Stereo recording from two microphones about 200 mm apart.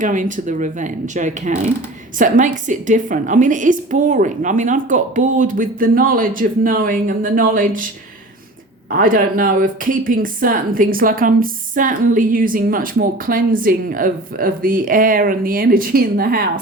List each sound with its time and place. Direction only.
0.0 s a woman's voice: 40° right (ahead or behind)
8.9 s speech: 45° right (ahead or behind)